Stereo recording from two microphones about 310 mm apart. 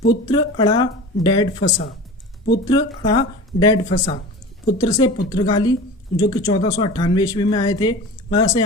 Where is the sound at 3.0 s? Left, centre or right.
Centre.